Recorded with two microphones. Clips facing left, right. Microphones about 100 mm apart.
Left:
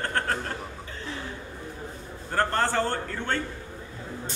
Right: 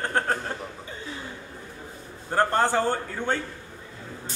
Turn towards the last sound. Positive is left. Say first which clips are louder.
# right 3 dB
turn(degrees=-15)  # may be behind; listen again after turning